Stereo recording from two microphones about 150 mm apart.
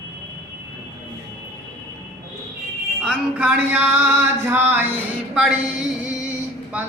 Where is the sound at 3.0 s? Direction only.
5° right (ahead or behind).